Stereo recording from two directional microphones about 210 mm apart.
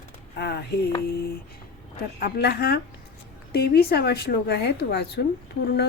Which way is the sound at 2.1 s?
45° left (ahead or behind).